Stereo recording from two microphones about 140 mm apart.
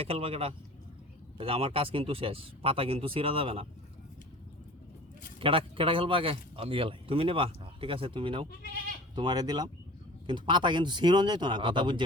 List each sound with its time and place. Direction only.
0.0 s speech: 45° right (ahead or behind)
5.4 s speech: 40° right (ahead or behind)